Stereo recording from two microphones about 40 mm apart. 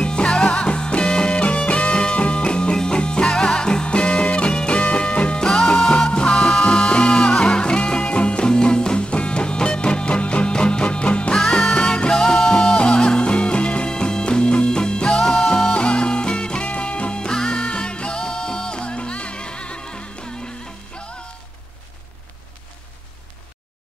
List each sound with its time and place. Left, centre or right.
0.0 s music: left
12.7 s music: left